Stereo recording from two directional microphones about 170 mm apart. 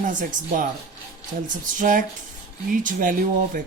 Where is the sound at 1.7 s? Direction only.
55° right (ahead or behind).